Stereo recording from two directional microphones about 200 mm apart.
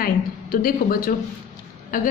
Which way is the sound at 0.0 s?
45° left (ahead or behind).